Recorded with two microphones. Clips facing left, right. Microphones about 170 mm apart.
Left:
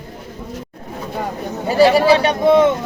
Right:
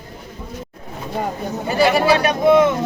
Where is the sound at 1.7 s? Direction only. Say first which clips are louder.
Left 4 dB; 35° left (ahead or behind).